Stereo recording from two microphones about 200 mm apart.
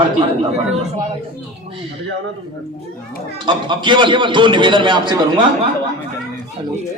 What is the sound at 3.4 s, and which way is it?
A man's voice, 25° right (ahead or behind).